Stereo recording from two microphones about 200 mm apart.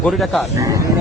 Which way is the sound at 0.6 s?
15° right (ahead or behind).